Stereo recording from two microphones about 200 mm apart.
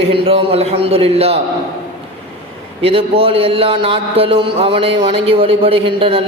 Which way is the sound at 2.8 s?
30° right (ahead or behind).